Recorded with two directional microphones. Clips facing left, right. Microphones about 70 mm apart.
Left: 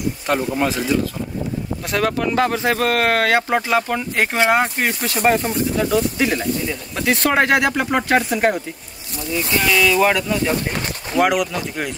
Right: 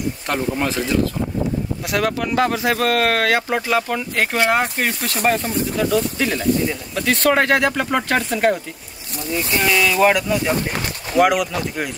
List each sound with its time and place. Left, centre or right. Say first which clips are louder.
0.3 s speech: left 2 dB; centre
2.0 s speech: left 1 dB; left
5.0 s speech: left 3 dB; centre
9.5 s speech: left 1 dB; right
9.8 s speech: even; centre